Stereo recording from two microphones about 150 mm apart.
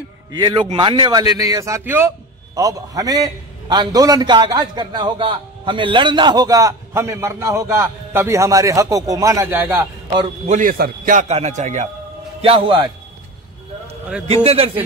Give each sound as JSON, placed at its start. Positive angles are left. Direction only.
{"t": 0.3, "sound": "speech", "side_deg": -30}
{"t": 1.1, "sound": "a man's voice", "side_deg": -25}
{"t": 10.5, "sound": "a man's voice", "side_deg": -65}
{"t": 11.2, "sound": "a man's voice", "side_deg": -45}
{"t": 12.4, "sound": "speech", "side_deg": -35}
{"t": 14.2, "sound": "speech", "side_deg": -40}